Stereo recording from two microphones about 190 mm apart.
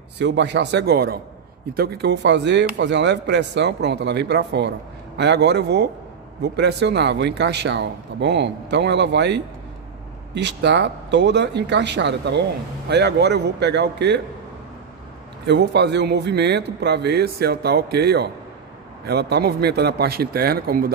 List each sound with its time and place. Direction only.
0.2 s speech: 65° right (ahead or behind)
15.4 s speech: 65° right (ahead or behind)